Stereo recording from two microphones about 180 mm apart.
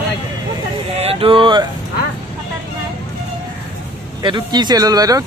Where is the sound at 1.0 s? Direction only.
30° right (ahead or behind).